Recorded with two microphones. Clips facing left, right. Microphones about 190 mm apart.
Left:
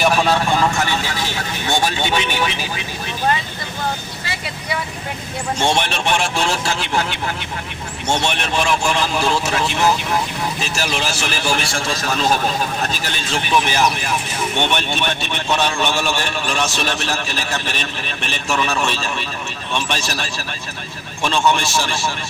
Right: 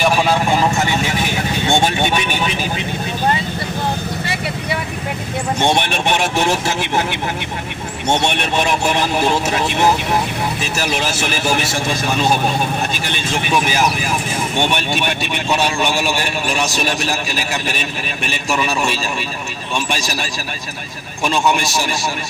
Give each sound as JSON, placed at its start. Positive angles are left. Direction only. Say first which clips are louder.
{"t": 0.0, "sound": "vehicle", "louder": "right 1 dB", "side_deg": -5}
{"t": 5.6, "sound": "a man's voice", "louder": "right 2 dB", "side_deg": -15}
{"t": 11.0, "sound": "speech", "louder": "right 3 dB", "side_deg": -20}
{"t": 13.3, "sound": "a man's voice", "louder": "even", "side_deg": -10}